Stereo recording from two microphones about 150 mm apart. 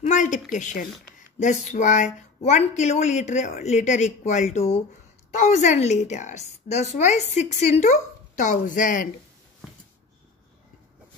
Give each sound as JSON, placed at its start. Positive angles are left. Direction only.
{"t": 0.0, "sound": "a woman's voice", "side_deg": 55}